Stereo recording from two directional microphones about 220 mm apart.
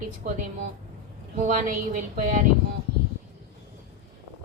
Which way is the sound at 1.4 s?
35° right (ahead or behind).